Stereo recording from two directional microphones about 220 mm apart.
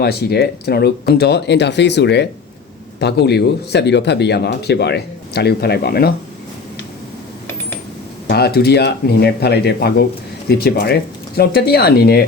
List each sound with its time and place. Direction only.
0.0 s speech: 45° left (ahead or behind)
8.3 s speech: 45° left (ahead or behind)